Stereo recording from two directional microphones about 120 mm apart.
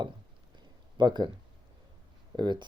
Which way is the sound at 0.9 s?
40° right (ahead or behind).